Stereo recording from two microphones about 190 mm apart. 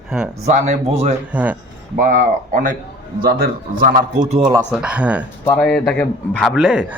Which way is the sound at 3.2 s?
50° right (ahead or behind).